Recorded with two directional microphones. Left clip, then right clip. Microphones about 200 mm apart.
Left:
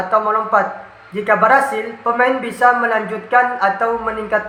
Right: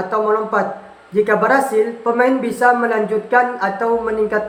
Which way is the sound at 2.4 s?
30° right (ahead or behind).